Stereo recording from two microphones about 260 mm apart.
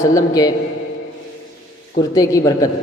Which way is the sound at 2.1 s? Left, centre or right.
Centre.